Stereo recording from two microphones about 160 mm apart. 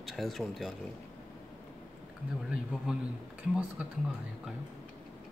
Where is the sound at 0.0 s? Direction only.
Centre (ahead or behind).